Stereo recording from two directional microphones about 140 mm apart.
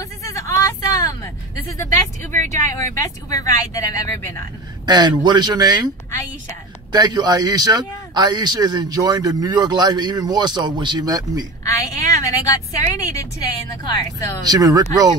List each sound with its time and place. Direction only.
0.2 s vehicle: 20° left (ahead or behind)
2.7 s speech: 20° left (ahead or behind)
4.8 s speech: 30° right (ahead or behind)
6.9 s a man's voice: 30° right (ahead or behind)
11.6 s a woman's voice: 20° left (ahead or behind)
14.4 s a man's voice: 25° right (ahead or behind)